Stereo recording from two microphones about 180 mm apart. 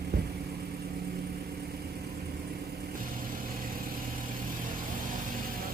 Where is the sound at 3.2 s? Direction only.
50° right (ahead or behind).